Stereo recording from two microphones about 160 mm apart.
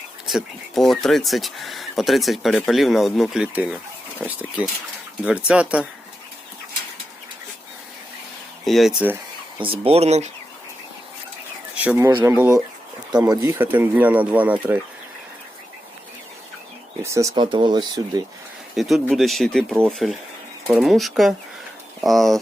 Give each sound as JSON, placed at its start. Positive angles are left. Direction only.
{"t": 0.3, "sound": "speech", "side_deg": 0}
{"t": 8.6, "sound": "speech", "side_deg": 0}
{"t": 9.6, "sound": "speech", "side_deg": -35}
{"t": 11.7, "sound": "speech", "side_deg": -10}
{"t": 17.0, "sound": "speech", "side_deg": -20}
{"t": 17.3, "sound": "speech", "side_deg": -30}
{"t": 18.8, "sound": "speech", "side_deg": 0}